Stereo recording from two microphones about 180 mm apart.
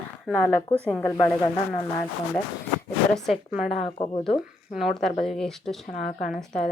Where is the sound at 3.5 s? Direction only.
Centre (ahead or behind).